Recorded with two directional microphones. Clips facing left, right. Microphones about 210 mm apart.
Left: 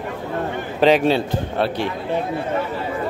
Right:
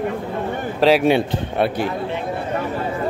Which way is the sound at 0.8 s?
5° right (ahead or behind).